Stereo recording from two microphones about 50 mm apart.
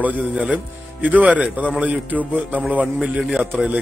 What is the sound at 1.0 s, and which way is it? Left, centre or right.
Speech, right.